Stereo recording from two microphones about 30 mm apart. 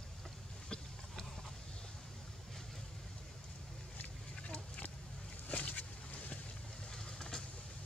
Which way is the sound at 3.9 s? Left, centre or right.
Left.